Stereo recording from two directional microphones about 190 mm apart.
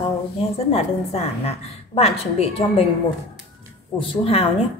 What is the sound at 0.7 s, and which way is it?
A woman's voice, 30° left (ahead or behind).